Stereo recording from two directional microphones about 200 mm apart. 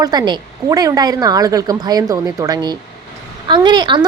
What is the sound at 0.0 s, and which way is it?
A woman's voice, 20° right (ahead or behind).